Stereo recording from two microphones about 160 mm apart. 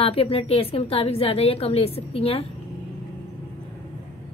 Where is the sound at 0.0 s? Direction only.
35° left (ahead or behind).